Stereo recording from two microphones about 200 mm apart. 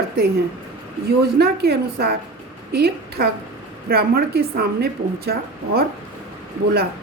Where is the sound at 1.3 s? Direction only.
55° right (ahead or behind).